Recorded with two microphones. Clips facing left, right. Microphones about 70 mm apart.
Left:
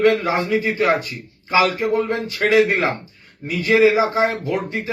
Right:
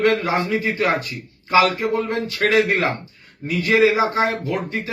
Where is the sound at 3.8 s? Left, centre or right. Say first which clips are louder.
Left 2 dB; left.